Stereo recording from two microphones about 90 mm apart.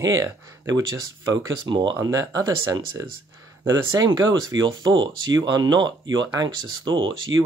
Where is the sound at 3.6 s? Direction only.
50° right (ahead or behind).